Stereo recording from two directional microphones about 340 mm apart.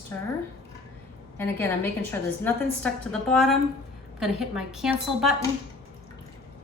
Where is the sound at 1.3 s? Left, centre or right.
Centre.